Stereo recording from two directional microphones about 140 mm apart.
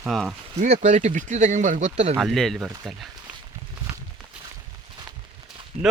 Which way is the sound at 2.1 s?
Centre (ahead or behind).